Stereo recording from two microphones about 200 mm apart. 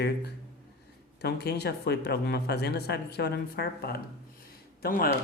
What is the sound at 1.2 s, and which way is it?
Speech, 55° left (ahead or behind).